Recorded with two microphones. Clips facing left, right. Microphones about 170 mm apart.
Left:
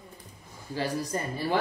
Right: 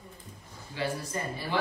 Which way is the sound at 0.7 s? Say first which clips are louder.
Left 3 dB; 40° left (ahead or behind).